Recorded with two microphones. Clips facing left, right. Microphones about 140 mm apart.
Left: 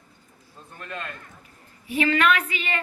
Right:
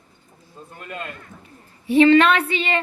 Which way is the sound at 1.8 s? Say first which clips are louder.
Right 9 dB; 30° right (ahead or behind).